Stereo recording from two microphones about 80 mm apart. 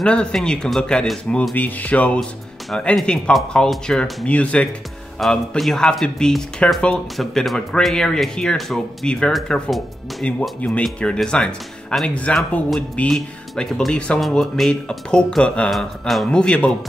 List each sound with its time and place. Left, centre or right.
0.0 s speech: centre
1.5 s speech: centre
9.3 s speech: centre
10.2 s speech: centre
13.1 s speech: centre
15.7 s speech: centre
16.3 s speech: centre